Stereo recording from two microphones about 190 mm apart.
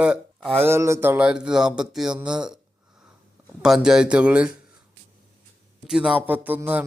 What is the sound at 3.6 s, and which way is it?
Speech, 5° right (ahead or behind).